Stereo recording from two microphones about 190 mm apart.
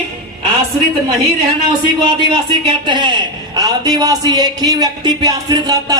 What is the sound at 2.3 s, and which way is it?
A man's voice, 25° right (ahead or behind).